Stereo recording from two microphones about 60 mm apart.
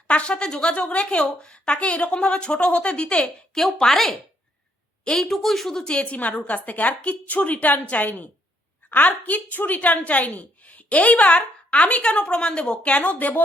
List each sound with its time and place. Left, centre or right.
0.1 s a woman's voice: centre
3.5 s a woman's voice: centre; by 13.4 s left